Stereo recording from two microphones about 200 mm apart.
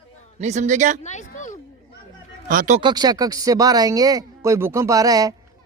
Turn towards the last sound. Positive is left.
turn(degrees=-20)  # may be behind; listen again after turning